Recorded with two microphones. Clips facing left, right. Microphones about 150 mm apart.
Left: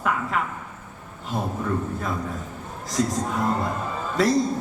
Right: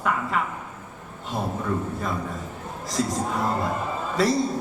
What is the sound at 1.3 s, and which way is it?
A man's voice, centre (ahead or behind).